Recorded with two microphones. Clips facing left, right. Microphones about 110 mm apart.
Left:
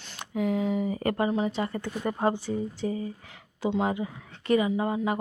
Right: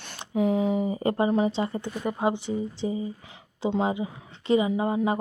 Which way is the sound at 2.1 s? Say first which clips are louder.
Even; 10° right (ahead or behind).